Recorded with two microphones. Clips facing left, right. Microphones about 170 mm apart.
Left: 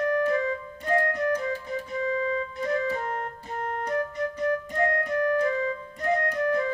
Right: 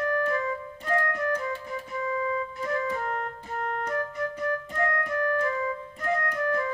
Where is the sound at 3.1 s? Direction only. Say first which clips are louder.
Even; 40° left (ahead or behind).